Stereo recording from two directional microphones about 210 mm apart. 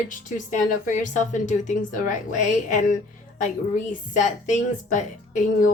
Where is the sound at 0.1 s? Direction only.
40° left (ahead or behind).